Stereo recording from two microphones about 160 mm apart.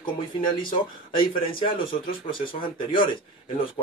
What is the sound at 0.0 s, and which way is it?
Speech, 30° left (ahead or behind).